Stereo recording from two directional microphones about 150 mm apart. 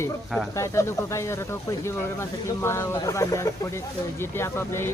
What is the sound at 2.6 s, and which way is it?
Speech, 15° left (ahead or behind).